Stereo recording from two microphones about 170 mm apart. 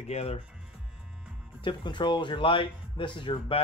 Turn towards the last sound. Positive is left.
turn(degrees=30)  # may be behind; listen again after turning